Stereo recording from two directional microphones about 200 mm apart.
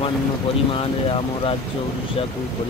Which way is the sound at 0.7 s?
25° left (ahead or behind).